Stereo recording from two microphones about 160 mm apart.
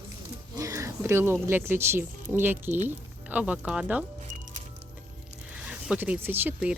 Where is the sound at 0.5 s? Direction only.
20° right (ahead or behind).